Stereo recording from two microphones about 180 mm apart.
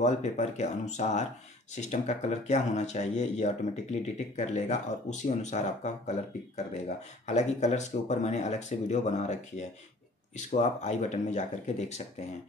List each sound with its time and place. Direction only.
0.0 s speech: 40° left (ahead or behind)